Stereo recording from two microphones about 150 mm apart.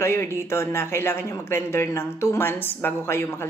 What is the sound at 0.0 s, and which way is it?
Speech, 15° left (ahead or behind).